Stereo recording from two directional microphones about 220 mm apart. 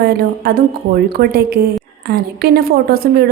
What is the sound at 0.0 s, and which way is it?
A woman's voice, 45° right (ahead or behind).